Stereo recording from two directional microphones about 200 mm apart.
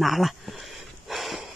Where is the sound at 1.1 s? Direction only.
Centre (ahead or behind).